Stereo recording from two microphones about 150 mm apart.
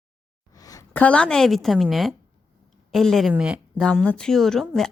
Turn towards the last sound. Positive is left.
turn(degrees=0)  # may be behind; listen again after turning